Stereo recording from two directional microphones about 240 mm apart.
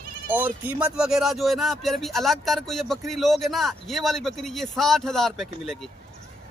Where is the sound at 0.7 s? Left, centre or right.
Centre.